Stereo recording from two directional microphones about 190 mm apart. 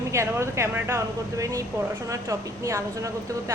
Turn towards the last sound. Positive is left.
turn(degrees=-15)  # may be behind; listen again after turning